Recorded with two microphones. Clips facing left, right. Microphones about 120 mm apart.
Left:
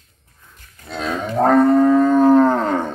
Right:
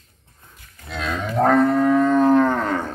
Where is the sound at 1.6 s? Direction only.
25° left (ahead or behind).